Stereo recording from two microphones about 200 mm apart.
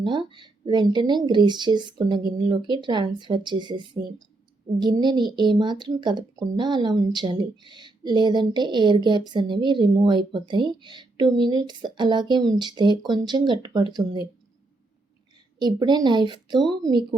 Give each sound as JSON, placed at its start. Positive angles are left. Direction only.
{"t": 0.0, "sound": "speech", "side_deg": -25}
{"t": 15.5, "sound": "speech", "side_deg": -20}